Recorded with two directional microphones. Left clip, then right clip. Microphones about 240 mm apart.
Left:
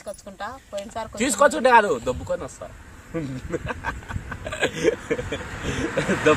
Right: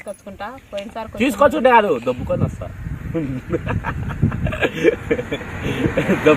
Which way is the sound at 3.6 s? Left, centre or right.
Centre.